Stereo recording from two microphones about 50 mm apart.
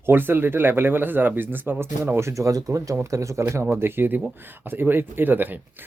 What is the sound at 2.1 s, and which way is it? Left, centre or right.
Speech, right.